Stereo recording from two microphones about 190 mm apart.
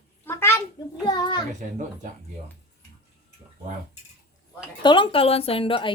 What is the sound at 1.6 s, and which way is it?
Speech, 45° right (ahead or behind).